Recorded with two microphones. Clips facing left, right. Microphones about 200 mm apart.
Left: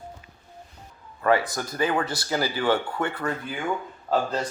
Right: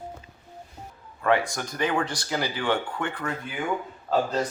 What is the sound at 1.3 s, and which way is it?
Speech, 5° left (ahead or behind).